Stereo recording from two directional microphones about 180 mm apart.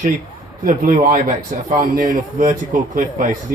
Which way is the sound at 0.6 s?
50° right (ahead or behind).